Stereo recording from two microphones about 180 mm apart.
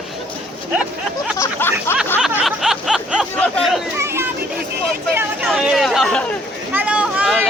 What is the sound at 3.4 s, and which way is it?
Chatter, centre (ahead or behind).